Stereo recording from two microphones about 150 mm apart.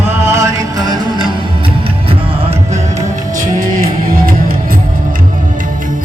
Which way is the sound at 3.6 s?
70° right (ahead or behind).